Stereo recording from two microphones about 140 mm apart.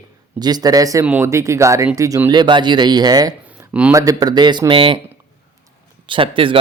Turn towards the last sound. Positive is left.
turn(degrees=-40)  # may be behind; listen again after turning